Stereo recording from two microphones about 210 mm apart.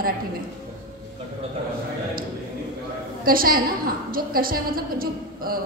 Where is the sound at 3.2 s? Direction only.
45° right (ahead or behind).